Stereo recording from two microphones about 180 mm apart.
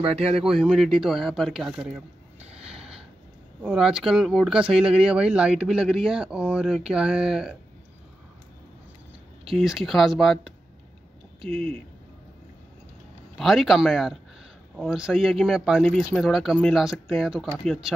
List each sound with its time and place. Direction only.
0.2 s speech: 35° right (ahead or behind)
0.5 s speech: 5° right (ahead or behind)
2.6 s a sound: 5° right (ahead or behind)
3.6 s speech: 5° right (ahead or behind)
9.5 s speech: centre (ahead or behind)
13.4 s speech: centre (ahead or behind)